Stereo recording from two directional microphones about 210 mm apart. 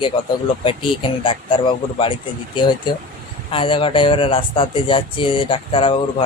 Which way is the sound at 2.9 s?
20° left (ahead or behind).